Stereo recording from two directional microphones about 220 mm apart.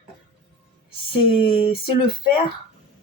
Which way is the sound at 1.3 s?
25° left (ahead or behind).